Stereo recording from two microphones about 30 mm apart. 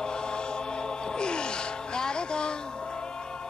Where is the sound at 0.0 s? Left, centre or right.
Left.